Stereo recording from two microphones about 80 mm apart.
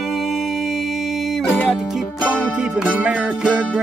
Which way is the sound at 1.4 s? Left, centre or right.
Centre.